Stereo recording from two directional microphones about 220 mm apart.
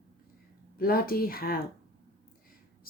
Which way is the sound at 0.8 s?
40° left (ahead or behind).